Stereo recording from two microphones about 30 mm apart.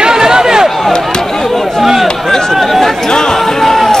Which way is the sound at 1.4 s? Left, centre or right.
Centre.